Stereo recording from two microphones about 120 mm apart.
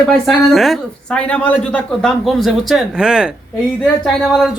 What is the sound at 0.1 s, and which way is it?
Speech, centre (ahead or behind).